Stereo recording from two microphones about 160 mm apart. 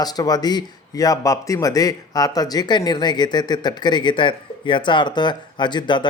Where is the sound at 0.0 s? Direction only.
25° left (ahead or behind).